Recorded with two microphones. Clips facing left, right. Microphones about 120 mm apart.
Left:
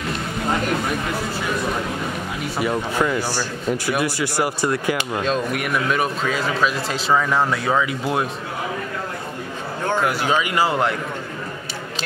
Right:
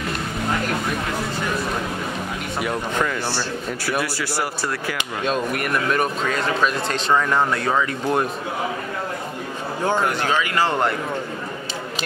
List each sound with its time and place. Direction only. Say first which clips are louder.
2.6 s speech: left 2 dB; centre (ahead or behind)
3.1 s speech: left 2 dB; 10° left (ahead or behind)
5.2 s speech: right 3 dB; centre (ahead or behind)
10.2 s speech: left 1 dB; 15° left (ahead or behind)
10.7 s speech: even; centre (ahead or behind)